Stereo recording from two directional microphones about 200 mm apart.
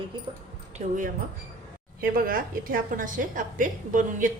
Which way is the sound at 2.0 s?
45° right (ahead or behind).